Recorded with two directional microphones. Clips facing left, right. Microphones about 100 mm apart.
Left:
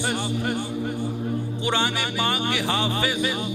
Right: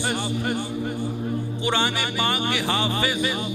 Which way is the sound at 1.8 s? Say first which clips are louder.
Even; 30° right (ahead or behind).